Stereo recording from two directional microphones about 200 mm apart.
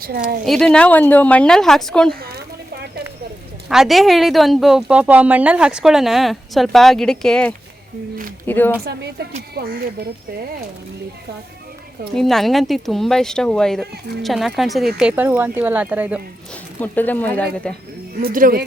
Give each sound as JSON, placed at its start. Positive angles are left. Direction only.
{"t": 0.0, "sound": "speech", "side_deg": -50}
{"t": 0.4, "sound": "speech", "side_deg": 0}
{"t": 3.7, "sound": "a woman's voice", "side_deg": 0}
{"t": 8.8, "sound": "a woman's voice", "side_deg": -55}
{"t": 12.1, "sound": "speech", "side_deg": 0}
{"t": 16.8, "sound": "speech", "side_deg": 10}
{"t": 18.2, "sound": "speech", "side_deg": -45}